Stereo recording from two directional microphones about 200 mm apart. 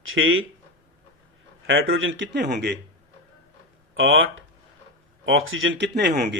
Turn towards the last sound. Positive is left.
turn(degrees=-55)  # may be behind; listen again after turning